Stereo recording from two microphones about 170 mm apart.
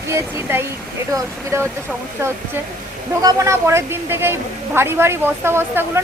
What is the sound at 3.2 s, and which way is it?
A woman's voice, 15° right (ahead or behind).